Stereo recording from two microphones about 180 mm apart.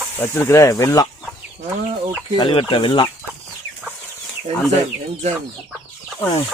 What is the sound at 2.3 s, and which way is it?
Speech, 30° left (ahead or behind).